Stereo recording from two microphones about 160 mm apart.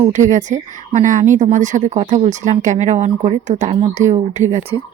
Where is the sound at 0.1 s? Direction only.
50° right (ahead or behind).